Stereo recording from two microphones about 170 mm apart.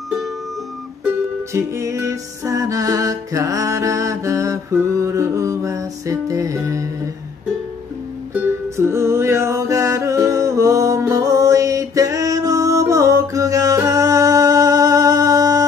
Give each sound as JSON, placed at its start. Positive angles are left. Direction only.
{"t": 1.5, "sound": "music", "side_deg": -15}
{"t": 8.7, "sound": "music", "side_deg": -15}